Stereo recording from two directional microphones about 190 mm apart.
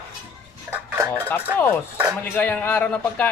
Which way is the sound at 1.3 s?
10° left (ahead or behind).